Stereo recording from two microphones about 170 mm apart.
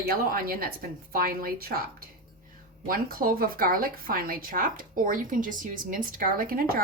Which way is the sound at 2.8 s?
60° right (ahead or behind).